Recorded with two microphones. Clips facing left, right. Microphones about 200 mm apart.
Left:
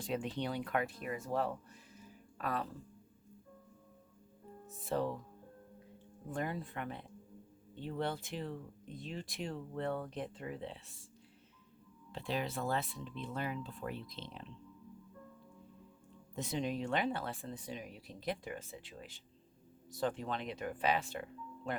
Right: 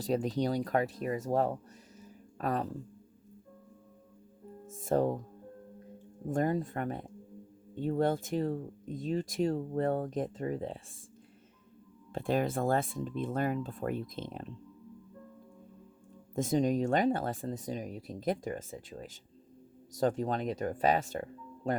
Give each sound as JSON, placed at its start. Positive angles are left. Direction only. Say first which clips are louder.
{"t": 0.0, "sound": "speech", "louder": "right 7 dB", "side_deg": -40}
{"t": 4.6, "sound": "speech", "louder": "right 7 dB", "side_deg": -45}
{"t": 6.2, "sound": "speech", "louder": "right 9 dB", "side_deg": -45}
{"t": 12.1, "sound": "speech", "louder": "right 8 dB", "side_deg": -50}
{"t": 16.3, "sound": "speech", "louder": "right 9 dB", "side_deg": -45}